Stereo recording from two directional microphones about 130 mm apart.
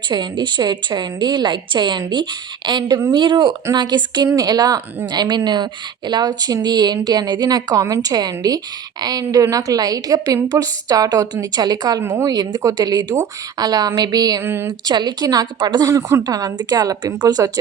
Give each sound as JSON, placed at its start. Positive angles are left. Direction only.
{"t": 0.1, "sound": "a woman's voice", "side_deg": -35}
{"t": 12.0, "sound": "a woman's voice", "side_deg": -20}
{"t": 12.3, "sound": "a woman's voice", "side_deg": -30}
{"t": 14.4, "sound": "a woman's voice", "side_deg": -15}
{"t": 14.8, "sound": "a woman's voice", "side_deg": -30}